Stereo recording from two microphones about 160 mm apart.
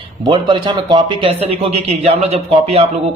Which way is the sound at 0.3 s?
30° right (ahead or behind).